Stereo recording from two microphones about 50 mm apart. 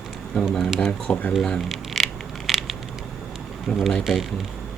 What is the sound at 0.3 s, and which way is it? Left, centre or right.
Speech, centre.